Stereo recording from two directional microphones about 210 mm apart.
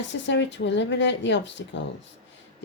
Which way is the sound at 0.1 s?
60° left (ahead or behind).